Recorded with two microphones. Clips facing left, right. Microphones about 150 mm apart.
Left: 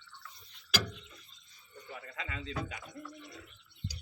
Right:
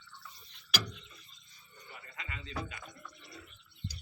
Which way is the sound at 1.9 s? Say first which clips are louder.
Left 5 dB; 90° left.